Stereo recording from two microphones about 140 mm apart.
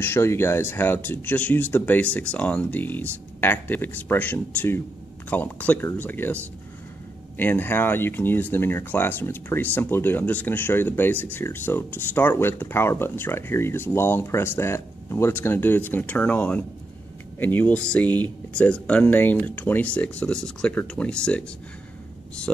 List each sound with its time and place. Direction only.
0.0 s speech: 15° left (ahead or behind)